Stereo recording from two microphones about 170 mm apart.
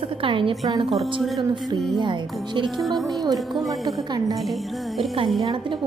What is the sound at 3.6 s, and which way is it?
Speech, 20° right (ahead or behind).